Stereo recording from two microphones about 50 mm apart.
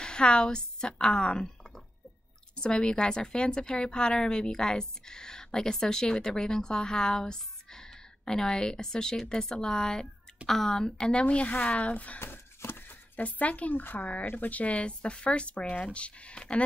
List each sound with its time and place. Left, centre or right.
0.0 s a woman's voice: centre
2.5 s a woman's voice: centre
12.2 s a sound: left
13.1 s a woman's voice: left